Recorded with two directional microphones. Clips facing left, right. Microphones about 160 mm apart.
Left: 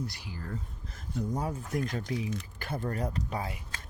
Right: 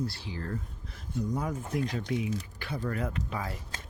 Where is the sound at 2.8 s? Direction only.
35° left (ahead or behind).